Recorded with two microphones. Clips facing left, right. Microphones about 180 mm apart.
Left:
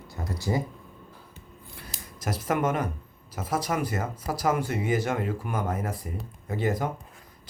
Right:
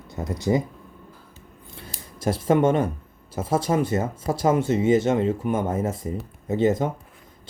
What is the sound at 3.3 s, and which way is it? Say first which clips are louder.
Speech: right 6 dB; 25° right (ahead or behind).